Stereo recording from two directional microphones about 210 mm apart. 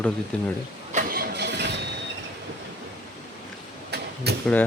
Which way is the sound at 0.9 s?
40° right (ahead or behind).